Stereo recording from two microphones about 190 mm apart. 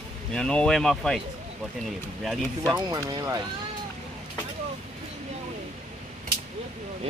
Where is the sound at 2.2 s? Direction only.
Centre (ahead or behind).